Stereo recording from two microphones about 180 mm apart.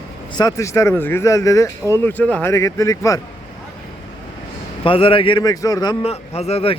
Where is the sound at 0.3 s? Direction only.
20° left (ahead or behind).